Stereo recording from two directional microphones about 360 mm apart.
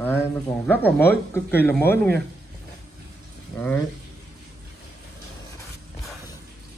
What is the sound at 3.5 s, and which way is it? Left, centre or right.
Speech, centre.